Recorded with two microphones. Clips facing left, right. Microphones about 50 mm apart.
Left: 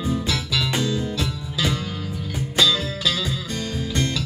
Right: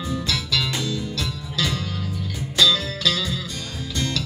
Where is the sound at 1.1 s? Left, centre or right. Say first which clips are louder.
Left 1 dB; centre.